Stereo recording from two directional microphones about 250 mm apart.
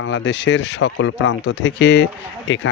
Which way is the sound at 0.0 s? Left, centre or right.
Left.